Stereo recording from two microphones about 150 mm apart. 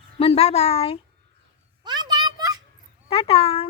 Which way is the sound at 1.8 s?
30° right (ahead or behind).